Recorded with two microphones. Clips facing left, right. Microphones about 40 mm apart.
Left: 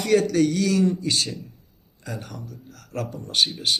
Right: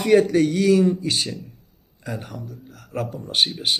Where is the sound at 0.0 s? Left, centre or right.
Centre.